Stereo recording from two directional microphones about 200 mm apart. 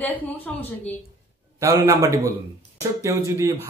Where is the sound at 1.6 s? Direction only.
15° right (ahead or behind).